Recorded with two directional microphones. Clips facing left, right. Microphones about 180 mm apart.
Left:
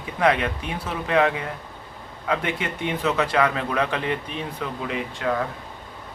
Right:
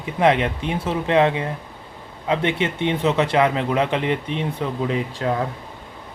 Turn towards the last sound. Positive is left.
turn(degrees=-30)  # may be behind; listen again after turning